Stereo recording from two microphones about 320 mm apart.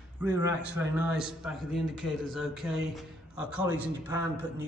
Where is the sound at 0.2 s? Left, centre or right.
Centre.